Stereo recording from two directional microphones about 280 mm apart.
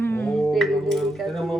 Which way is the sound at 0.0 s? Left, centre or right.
Centre.